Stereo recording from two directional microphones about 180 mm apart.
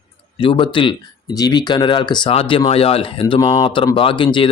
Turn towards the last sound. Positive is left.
turn(degrees=25)  # may be behind; listen again after turning